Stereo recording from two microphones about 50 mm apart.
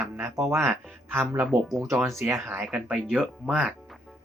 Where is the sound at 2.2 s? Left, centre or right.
Right.